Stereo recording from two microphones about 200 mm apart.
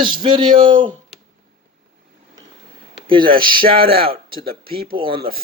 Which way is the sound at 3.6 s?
50° right (ahead or behind).